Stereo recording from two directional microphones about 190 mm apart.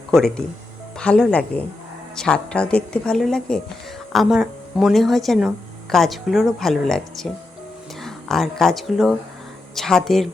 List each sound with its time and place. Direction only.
0.1 s a woman's voice: 5° left (ahead or behind)